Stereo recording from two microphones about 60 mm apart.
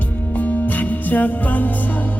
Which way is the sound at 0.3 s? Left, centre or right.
Left.